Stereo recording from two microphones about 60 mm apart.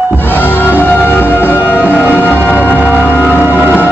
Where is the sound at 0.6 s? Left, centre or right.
Left.